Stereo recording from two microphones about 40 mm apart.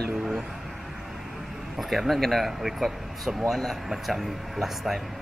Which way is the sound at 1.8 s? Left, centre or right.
Centre.